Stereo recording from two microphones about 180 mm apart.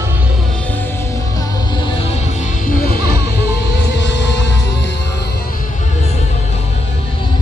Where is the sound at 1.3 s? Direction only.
25° left (ahead or behind); by 4.9 s 75° left (ahead or behind).